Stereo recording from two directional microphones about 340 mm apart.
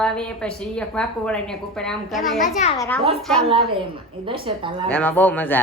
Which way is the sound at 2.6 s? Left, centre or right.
Centre.